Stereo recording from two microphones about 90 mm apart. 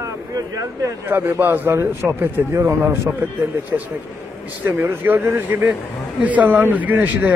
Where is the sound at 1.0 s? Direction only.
25° right (ahead or behind).